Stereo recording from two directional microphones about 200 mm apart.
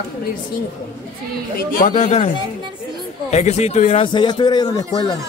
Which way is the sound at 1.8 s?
35° left (ahead or behind).